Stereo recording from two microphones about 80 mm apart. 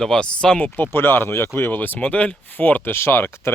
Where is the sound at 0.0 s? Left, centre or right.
Centre.